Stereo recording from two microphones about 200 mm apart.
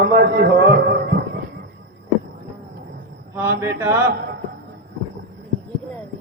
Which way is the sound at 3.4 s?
10° right (ahead or behind).